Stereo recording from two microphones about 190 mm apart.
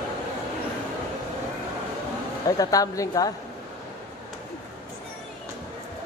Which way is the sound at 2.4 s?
20° left (ahead or behind).